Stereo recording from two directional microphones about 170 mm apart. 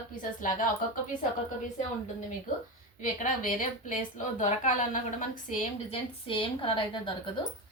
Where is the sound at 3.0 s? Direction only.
50° left (ahead or behind).